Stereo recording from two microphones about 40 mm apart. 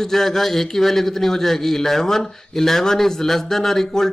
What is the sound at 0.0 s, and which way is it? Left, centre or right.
A man's voice, centre.